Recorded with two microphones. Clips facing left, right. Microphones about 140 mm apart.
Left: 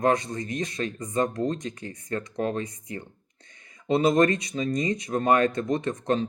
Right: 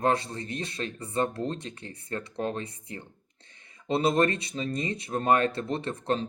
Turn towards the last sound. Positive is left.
turn(degrees=-30)  # may be behind; listen again after turning